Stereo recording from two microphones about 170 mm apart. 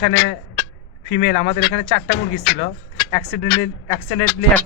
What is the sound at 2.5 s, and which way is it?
Speech, 70° left (ahead or behind).